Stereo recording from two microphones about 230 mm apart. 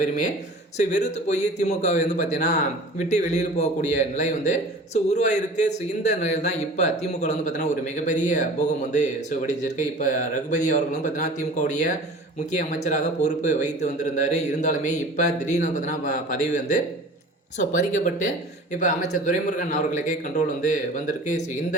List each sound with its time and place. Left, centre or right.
0.8 s a man's voice: left